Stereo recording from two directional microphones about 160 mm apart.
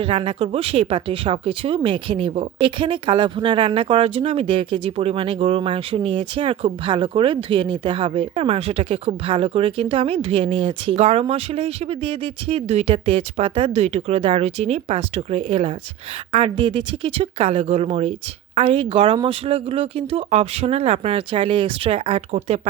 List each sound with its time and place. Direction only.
0.0 s speech: 35° right (ahead or behind)